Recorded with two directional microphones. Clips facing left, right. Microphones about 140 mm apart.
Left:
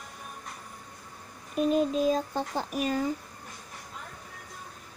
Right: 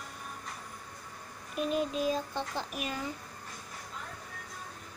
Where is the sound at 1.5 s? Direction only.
40° left (ahead or behind).